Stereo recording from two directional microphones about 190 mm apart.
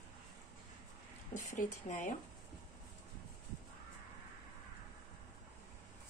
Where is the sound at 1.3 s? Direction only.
40° left (ahead or behind).